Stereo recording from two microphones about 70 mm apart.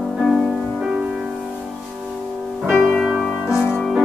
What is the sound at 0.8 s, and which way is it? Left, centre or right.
Music, centre.